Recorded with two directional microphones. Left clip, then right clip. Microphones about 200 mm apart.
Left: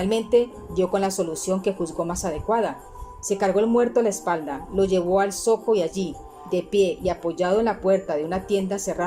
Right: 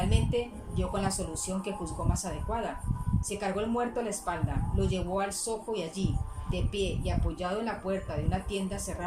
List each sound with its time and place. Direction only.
0.1 s speech: 45° left (ahead or behind)